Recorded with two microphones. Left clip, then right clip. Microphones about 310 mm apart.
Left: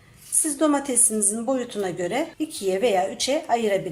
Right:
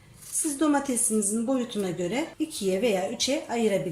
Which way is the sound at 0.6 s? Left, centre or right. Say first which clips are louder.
Left 3 dB; left.